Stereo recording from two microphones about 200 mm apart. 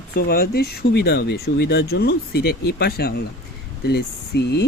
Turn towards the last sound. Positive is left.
turn(degrees=55)  # may be behind; listen again after turning